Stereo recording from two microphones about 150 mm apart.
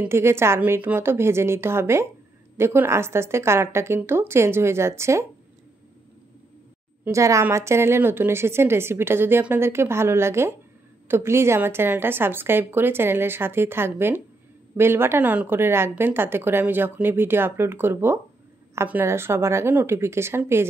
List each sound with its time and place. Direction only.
0.0 s a woman's voice: 15° right (ahead or behind)
7.1 s a woman's voice: 20° right (ahead or behind)